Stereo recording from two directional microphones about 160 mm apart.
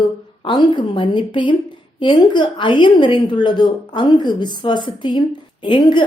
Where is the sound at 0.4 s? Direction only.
30° left (ahead or behind).